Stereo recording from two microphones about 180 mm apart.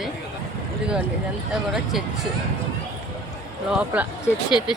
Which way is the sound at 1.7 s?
Centre (ahead or behind).